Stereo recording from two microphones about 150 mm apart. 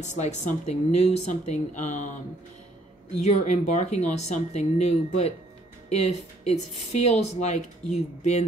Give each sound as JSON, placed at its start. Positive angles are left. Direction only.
{"t": 0.0, "sound": "speech", "side_deg": 50}
{"t": 3.2, "sound": "speech", "side_deg": 50}